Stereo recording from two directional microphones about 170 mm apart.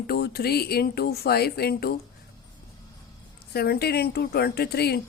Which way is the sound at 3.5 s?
70° left (ahead or behind).